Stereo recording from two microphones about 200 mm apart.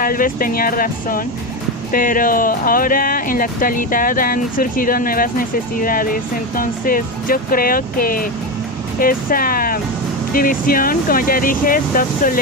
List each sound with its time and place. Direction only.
0.0 s speech: 45° left (ahead or behind)